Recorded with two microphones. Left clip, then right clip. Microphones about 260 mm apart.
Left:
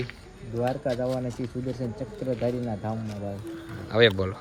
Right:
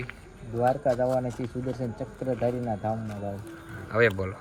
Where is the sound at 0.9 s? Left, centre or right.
Centre.